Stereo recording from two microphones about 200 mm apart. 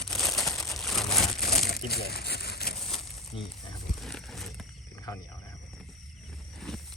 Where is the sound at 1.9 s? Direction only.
50° left (ahead or behind).